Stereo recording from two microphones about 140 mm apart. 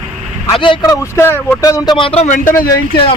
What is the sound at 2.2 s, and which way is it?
Speech, 70° left (ahead or behind).